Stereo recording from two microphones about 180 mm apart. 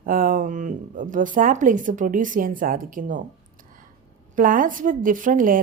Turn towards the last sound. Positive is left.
turn(degrees=-50)  # may be behind; listen again after turning